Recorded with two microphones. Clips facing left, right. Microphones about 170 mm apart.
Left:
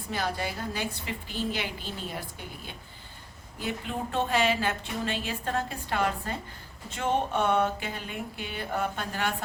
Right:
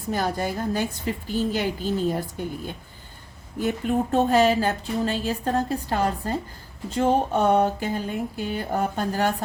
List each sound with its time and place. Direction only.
0.1 s a woman's voice: 45° right (ahead or behind)
3.6 s speech: 45° right (ahead or behind)